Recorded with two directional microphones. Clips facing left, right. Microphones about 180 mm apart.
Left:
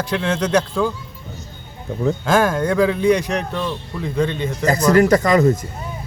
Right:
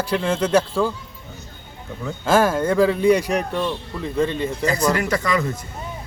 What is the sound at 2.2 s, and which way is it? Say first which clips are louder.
A man's voice: right 2 dB; 5° right (ahead or behind).